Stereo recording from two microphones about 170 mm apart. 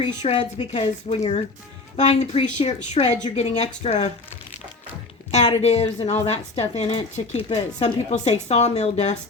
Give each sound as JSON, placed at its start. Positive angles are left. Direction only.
{"t": 0.0, "sound": "a woman's voice", "side_deg": 35}
{"t": 5.3, "sound": "a woman's voice", "side_deg": 40}